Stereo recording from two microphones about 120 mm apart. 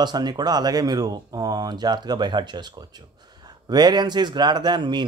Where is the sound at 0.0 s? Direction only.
35° right (ahead or behind).